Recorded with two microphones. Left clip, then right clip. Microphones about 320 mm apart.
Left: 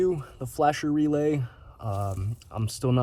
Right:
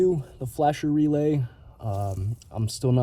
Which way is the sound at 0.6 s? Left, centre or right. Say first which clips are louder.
Right 1 dB; left.